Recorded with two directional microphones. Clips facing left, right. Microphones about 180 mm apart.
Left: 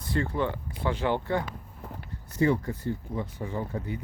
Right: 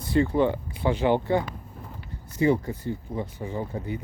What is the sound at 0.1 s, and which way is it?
Speech, 20° right (ahead or behind).